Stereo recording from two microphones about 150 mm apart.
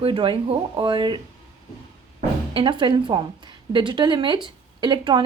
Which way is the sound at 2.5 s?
30° right (ahead or behind).